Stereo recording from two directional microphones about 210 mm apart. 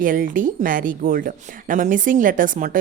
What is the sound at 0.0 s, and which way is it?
Speech, 40° right (ahead or behind).